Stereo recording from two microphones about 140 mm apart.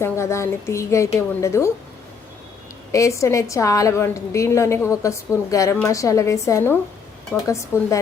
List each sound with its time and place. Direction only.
0.0 s a woman's voice: 20° left (ahead or behind)
2.9 s a woman's voice: 20° left (ahead or behind)